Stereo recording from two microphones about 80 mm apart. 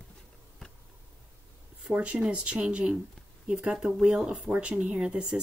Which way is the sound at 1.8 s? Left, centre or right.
Centre.